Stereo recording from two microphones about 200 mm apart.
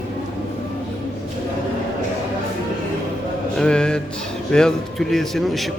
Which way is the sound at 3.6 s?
5° left (ahead or behind).